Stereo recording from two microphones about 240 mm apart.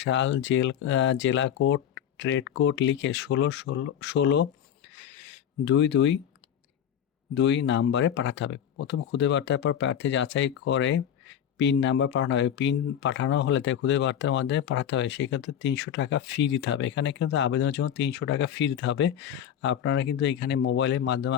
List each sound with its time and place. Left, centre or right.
0.0 s speech: left
7.3 s speech: left